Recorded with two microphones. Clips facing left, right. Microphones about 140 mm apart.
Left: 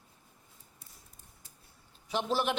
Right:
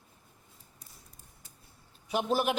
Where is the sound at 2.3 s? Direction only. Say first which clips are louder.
Right 2 dB; 5° right (ahead or behind).